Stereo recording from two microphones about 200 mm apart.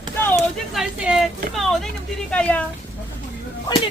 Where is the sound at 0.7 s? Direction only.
5° right (ahead or behind).